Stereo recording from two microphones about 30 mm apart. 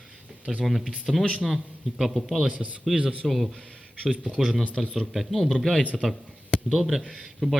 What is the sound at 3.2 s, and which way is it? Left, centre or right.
Speech, centre.